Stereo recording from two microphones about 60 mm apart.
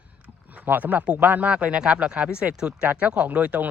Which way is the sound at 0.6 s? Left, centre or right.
Right.